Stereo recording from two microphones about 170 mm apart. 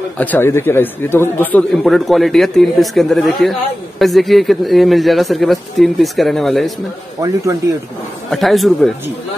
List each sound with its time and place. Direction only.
0.2 s speech: 10° left (ahead or behind)
7.2 s speech: 20° right (ahead or behind)
8.3 s speech: centre (ahead or behind)